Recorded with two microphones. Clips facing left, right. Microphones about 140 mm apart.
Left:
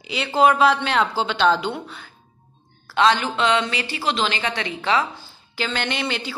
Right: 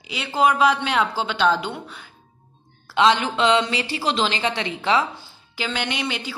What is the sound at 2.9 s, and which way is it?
A woman's voice, 20° right (ahead or behind).